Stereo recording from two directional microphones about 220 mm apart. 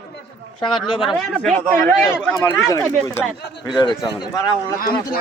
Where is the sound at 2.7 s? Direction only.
10° left (ahead or behind).